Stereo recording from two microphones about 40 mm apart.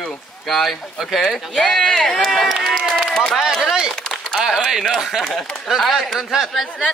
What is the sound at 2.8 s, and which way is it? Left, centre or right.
Run, centre.